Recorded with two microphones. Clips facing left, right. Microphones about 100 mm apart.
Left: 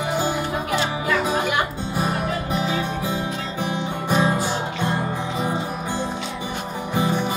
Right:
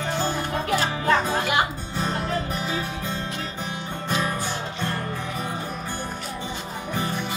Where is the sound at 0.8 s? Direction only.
30° right (ahead or behind).